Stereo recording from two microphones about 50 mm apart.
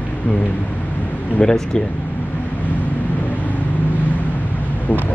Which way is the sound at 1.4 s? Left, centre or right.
Centre.